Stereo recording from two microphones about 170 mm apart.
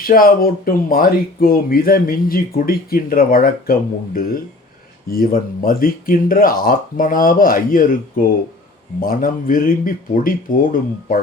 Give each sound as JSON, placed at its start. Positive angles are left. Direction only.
{"t": 0.0, "sound": "speech", "side_deg": 55}